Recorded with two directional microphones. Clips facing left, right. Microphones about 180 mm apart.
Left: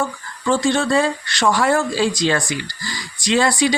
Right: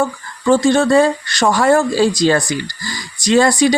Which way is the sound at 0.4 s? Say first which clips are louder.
Right 6 dB; 45° right (ahead or behind).